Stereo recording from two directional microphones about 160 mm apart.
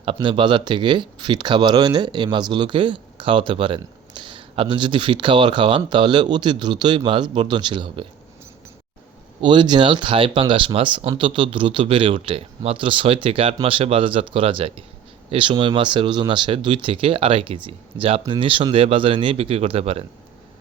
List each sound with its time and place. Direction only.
0.0 s speech: 35° right (ahead or behind)
9.4 s speech: 30° right (ahead or behind)